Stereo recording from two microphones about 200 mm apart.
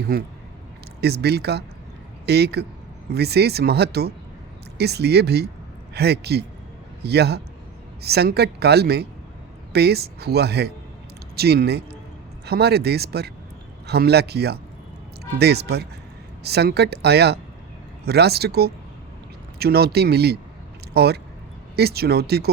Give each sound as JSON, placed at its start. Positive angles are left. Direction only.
{"t": 0.1, "sound": "a woman's voice", "side_deg": -50}